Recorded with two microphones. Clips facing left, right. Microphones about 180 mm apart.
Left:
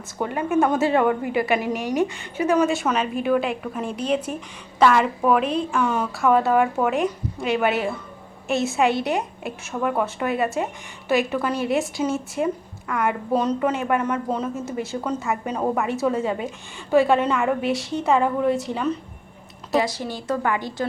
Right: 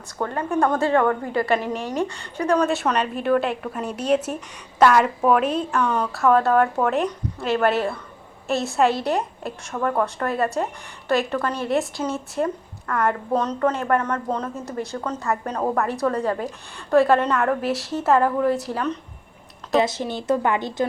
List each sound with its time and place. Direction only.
0.2 s a woman's voice: 15° left (ahead or behind); by 5.8 s 5° right (ahead or behind)
5.8 s a woman's voice: 5° left (ahead or behind)
19.8 s speech: 20° right (ahead or behind)